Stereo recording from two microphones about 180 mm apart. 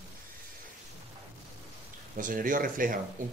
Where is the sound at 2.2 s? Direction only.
50° right (ahead or behind).